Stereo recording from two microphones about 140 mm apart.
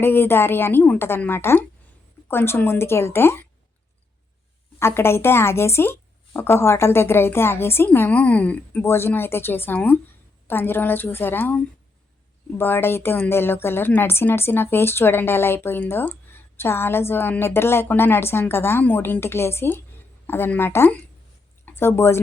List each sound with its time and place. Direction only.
0.0 s speech: 15° left (ahead or behind)
4.8 s a woman's voice: 15° left (ahead or behind)